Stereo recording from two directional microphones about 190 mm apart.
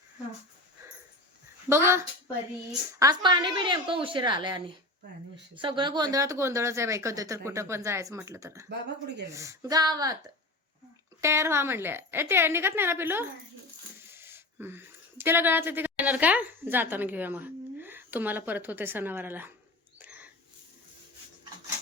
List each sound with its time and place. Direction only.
1.7 s a woman's voice: 15° right (ahead or behind)
20.0 s mouse: 10° right (ahead or behind)